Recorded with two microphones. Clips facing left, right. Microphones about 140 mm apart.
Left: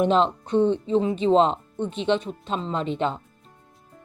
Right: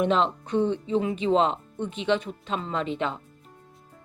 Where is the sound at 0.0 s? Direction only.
Centre (ahead or behind).